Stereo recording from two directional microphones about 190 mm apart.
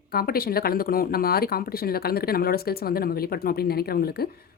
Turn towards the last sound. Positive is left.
turn(degrees=55)  # may be behind; listen again after turning